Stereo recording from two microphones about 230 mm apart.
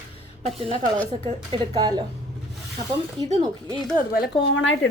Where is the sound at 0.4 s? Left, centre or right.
Right.